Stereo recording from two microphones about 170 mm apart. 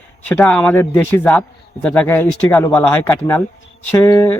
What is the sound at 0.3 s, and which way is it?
A man's voice, 5° left (ahead or behind).